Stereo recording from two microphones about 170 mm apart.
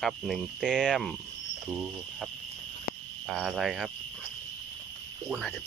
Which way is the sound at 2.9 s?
60° left (ahead or behind).